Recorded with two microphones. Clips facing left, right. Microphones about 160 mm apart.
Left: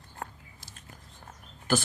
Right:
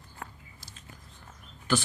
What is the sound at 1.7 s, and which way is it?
Speech, 45° left (ahead or behind).